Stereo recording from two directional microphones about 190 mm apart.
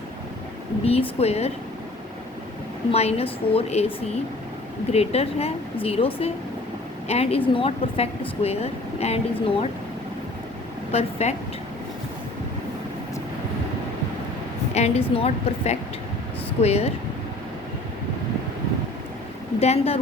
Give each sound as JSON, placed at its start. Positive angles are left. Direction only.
{"t": 0.9, "sound": "a woman's voice", "side_deg": 30}
{"t": 2.9, "sound": "a woman's voice", "side_deg": 35}
{"t": 10.9, "sound": "a woman's voice", "side_deg": 35}
{"t": 14.7, "sound": "a woman's voice", "side_deg": 35}
{"t": 19.5, "sound": "a woman's voice", "side_deg": 35}